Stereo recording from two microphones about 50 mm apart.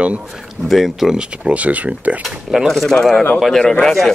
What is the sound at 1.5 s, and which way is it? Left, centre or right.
Speech, right.